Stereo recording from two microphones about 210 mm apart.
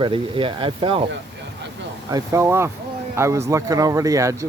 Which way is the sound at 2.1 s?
15° right (ahead or behind).